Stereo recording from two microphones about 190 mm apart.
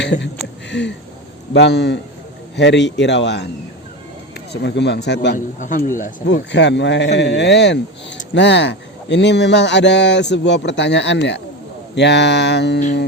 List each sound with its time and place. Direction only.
0.0 s speech: 70° left (ahead or behind)
0.7 s a sound: 65° left (ahead or behind)
1.5 s speech: 65° left (ahead or behind)
4.5 s speech: 65° left (ahead or behind)
5.5 s speech: 45° left (ahead or behind)
6.2 s speech: 65° left (ahead or behind)